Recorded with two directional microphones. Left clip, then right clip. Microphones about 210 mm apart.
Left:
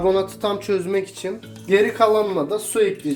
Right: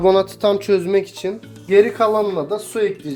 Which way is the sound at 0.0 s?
50° right (ahead or behind).